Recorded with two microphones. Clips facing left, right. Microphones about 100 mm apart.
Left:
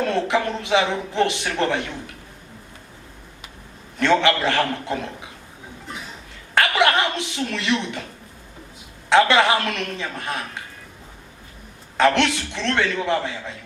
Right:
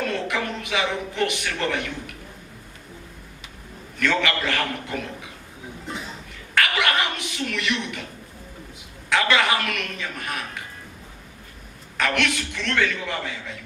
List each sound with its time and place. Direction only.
0.0 s speech: 30° left (ahead or behind)
4.0 s speech: 30° left (ahead or behind)
6.5 s a sound: 30° left (ahead or behind)
9.0 s speech: 30° left (ahead or behind)
11.9 s speech: 30° left (ahead or behind)